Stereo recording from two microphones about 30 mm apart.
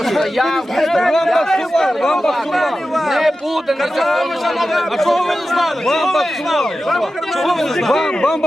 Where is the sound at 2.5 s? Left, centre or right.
Centre.